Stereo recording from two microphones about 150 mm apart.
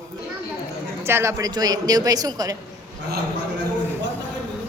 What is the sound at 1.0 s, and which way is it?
A man's voice, 15° right (ahead or behind).